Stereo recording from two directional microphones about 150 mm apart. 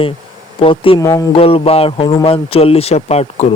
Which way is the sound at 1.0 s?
20° left (ahead or behind).